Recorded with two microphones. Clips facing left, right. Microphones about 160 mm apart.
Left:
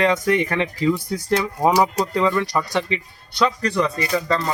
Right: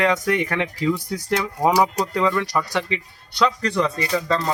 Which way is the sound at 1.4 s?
15° left (ahead or behind).